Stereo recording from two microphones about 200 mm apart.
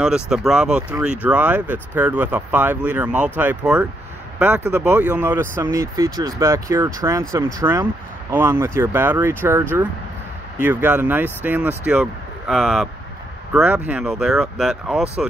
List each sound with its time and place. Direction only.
0.0 s speech: 5° right (ahead or behind)